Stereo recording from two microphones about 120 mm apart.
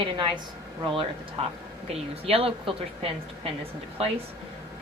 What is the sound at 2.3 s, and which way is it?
A woman's voice, 50° right (ahead or behind).